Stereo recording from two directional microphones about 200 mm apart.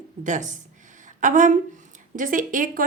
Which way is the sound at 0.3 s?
40° right (ahead or behind).